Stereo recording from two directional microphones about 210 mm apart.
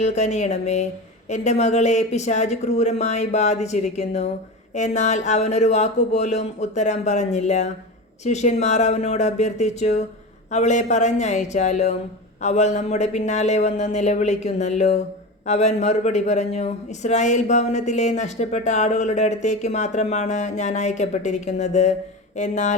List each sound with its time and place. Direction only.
0.0 s speech: 35° left (ahead or behind)